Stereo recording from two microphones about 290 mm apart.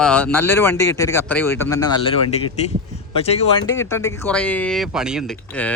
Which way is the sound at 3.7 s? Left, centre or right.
Centre.